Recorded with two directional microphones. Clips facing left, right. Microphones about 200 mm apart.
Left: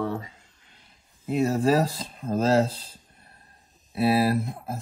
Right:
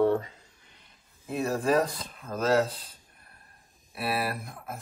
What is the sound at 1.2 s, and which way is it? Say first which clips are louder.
Speech: left 5 dB; 30° left (ahead or behind).